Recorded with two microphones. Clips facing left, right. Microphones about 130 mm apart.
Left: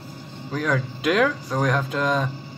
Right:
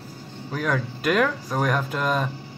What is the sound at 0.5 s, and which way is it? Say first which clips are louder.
Speech: left 1 dB; 5° right (ahead or behind).